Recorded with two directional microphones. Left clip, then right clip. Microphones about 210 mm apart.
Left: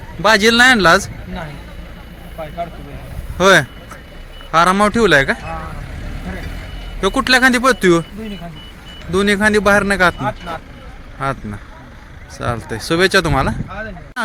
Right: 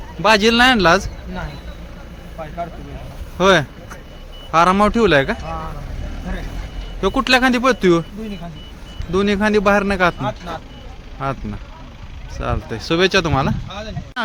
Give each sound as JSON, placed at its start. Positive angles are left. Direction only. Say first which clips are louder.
{"t": 0.2, "sound": "speech", "louder": "left 2 dB", "side_deg": 0}
{"t": 2.4, "sound": "speech", "louder": "left 3 dB", "side_deg": 35}
{"t": 3.3, "sound": "speech", "louder": "left 3 dB", "side_deg": 5}
{"t": 7.0, "sound": "speech", "louder": "left 3 dB", "side_deg": 0}
{"t": 12.4, "sound": "speech", "louder": "left 2 dB", "side_deg": 0}